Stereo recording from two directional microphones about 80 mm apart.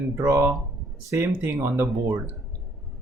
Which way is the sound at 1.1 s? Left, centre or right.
Right.